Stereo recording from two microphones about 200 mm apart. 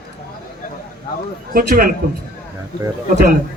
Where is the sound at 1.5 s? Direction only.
45° right (ahead or behind).